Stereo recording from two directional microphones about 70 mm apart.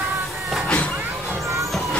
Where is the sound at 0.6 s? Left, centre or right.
Centre.